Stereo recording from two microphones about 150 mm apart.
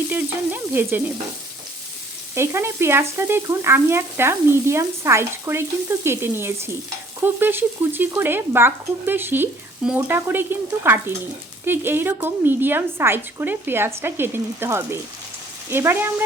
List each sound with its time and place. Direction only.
0.1 s speech: 10° right (ahead or behind)
2.3 s speech: 15° right (ahead or behind)